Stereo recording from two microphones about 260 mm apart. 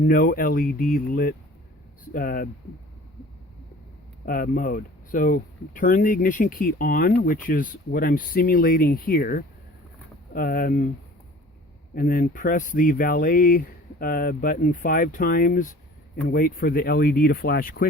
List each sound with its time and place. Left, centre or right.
0.0 s speech: left
4.3 s speech: left
11.9 s speech: left